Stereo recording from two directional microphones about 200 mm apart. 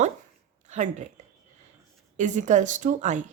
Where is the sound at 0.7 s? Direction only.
35° right (ahead or behind).